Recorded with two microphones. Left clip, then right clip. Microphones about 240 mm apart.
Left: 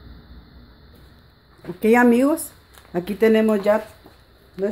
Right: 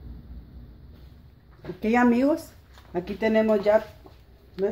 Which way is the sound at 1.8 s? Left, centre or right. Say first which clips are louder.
Left 6 dB; left.